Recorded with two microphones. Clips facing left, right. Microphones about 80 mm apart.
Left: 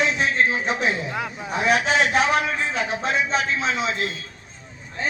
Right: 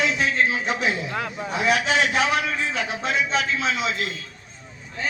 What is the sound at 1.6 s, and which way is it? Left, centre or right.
A man's voice, left.